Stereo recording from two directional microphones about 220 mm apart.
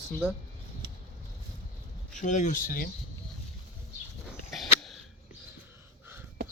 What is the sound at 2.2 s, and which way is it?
Speech, 35° left (ahead or behind).